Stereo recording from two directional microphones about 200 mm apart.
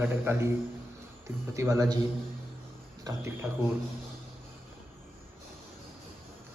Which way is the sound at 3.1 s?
15° right (ahead or behind).